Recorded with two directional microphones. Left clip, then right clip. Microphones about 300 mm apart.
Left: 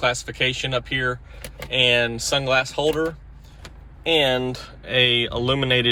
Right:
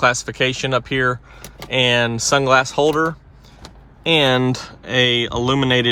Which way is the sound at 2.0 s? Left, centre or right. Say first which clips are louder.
Right 6 dB; right.